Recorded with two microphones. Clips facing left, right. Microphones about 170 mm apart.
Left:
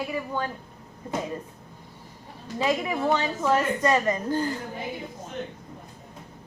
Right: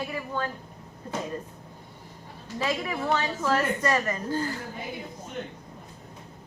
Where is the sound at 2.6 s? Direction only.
20° left (ahead or behind).